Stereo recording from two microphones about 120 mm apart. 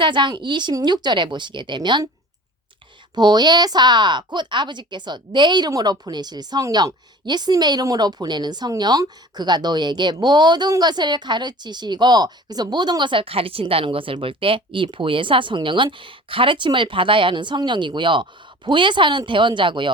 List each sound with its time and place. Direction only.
0.0 s speech: 40° right (ahead or behind)
3.2 s speech: 35° right (ahead or behind)